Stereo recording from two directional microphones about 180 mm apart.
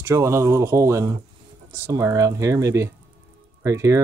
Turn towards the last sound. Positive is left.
turn(degrees=-20)  # may be behind; listen again after turning